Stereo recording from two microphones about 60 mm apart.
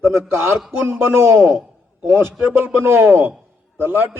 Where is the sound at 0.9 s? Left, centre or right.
Right.